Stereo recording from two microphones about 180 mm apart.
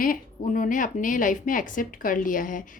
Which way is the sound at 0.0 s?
50° left (ahead or behind).